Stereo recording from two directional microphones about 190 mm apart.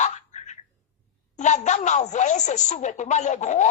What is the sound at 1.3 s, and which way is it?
Speech, 40° left (ahead or behind).